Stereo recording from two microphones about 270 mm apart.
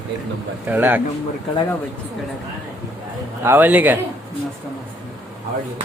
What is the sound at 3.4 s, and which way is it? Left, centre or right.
Speech, centre.